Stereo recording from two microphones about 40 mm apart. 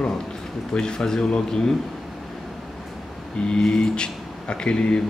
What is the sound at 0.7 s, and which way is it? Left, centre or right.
Speech, centre.